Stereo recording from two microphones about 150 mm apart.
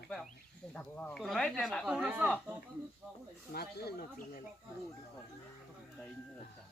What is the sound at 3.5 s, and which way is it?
Speech, 90° left.